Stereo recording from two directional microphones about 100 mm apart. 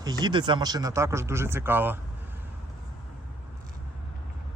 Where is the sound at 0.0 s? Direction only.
40° right (ahead or behind); by 2.0 s 20° right (ahead or behind).